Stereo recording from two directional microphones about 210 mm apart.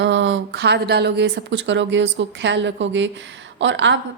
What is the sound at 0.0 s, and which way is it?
Speech, 60° right (ahead or behind).